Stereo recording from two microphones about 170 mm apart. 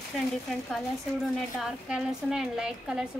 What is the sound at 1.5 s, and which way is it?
Speech, 5° right (ahead or behind).